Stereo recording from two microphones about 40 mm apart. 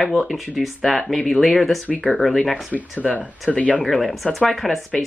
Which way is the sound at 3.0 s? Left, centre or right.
Left.